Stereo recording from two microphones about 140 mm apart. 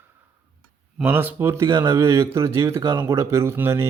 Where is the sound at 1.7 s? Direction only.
30° right (ahead or behind).